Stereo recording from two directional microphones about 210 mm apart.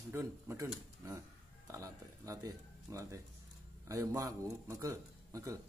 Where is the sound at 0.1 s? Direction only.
15° right (ahead or behind).